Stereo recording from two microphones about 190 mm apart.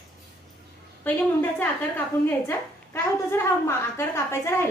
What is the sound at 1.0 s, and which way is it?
A woman's voice, 10° left (ahead or behind).